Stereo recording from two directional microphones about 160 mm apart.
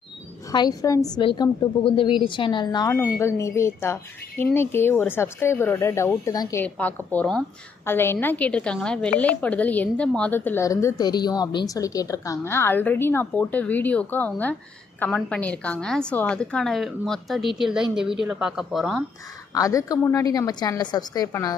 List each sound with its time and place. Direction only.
0.5 s a woman's voice: 25° left (ahead or behind)
2.9 s a woman's voice: 15° left (ahead or behind)
6.6 s a woman's voice: 10° left (ahead or behind)
19.5 s a woman's voice: 20° left (ahead or behind)